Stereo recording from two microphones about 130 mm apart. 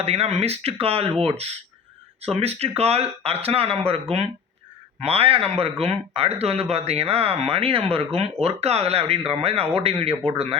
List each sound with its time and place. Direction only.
0.0 s speech: 55° right (ahead or behind)